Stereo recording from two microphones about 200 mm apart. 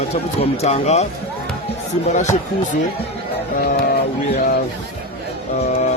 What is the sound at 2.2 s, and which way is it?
Speech, 35° left (ahead or behind).